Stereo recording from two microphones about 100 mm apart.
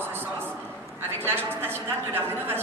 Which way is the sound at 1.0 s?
20° right (ahead or behind).